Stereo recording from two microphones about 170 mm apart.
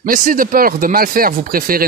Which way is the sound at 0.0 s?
55° right (ahead or behind).